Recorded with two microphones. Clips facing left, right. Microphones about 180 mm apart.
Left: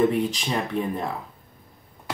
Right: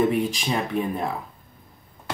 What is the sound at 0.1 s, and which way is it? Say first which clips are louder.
Speech: right 1 dB; 10° right (ahead or behind).